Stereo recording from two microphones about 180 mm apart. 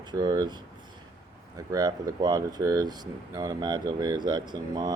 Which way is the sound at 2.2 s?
20° right (ahead or behind).